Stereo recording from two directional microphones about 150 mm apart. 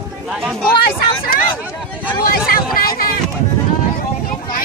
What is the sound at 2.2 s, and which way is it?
Vehicle, 80° left.